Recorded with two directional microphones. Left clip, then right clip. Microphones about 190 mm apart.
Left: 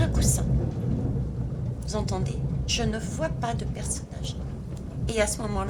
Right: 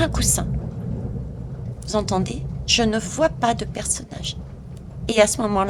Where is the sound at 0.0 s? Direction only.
40° right (ahead or behind).